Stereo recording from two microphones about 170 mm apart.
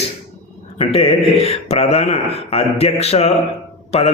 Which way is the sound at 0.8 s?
35° left (ahead or behind).